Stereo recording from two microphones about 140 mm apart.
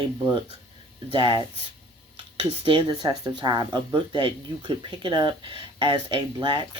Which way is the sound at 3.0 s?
30° right (ahead or behind).